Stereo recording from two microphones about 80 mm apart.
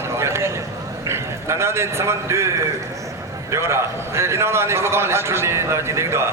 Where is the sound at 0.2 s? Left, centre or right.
Right.